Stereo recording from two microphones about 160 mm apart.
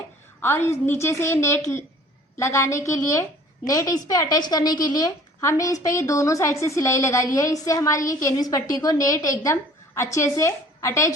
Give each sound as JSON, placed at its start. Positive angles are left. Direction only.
{"t": 0.4, "sound": "a woman's voice", "side_deg": 15}